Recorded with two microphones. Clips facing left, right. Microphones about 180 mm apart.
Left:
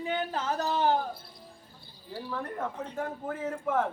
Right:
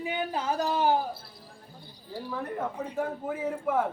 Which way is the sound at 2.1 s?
10° right (ahead or behind).